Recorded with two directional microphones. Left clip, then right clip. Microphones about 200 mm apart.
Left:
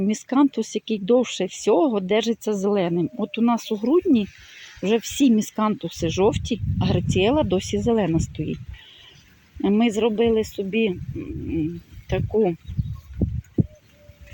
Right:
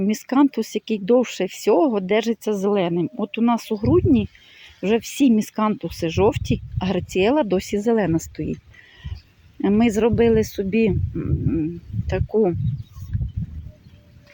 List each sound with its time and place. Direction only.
0.0 s speech: 10° right (ahead or behind)
9.6 s speech: 5° right (ahead or behind)
12.0 s speech: 5° right (ahead or behind)